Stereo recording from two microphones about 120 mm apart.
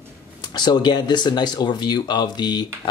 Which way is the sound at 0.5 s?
35° left (ahead or behind).